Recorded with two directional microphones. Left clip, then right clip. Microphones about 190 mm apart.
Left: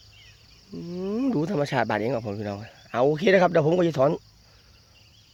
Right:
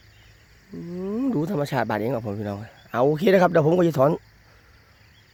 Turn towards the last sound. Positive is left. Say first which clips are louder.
# right 2 dB
turn(degrees=-25)  # may be behind; listen again after turning